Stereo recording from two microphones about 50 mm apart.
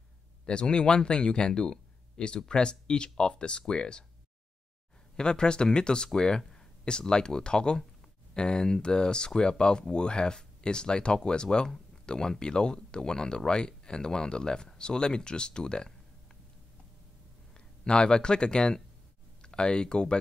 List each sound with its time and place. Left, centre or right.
0.5 s speech: centre
5.1 s speech: centre
17.6 s speech: centre